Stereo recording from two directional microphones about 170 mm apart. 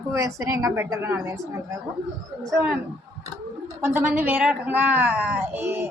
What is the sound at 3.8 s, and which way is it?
Speech, 10° right (ahead or behind).